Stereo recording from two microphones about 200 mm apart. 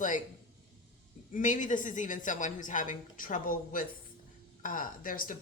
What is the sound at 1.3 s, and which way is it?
A woman's voice, 40° left (ahead or behind).